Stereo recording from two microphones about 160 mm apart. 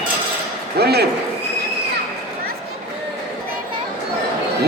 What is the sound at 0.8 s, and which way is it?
Speech, 90° right.